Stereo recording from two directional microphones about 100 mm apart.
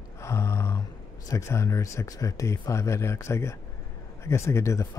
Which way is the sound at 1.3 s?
30° left (ahead or behind).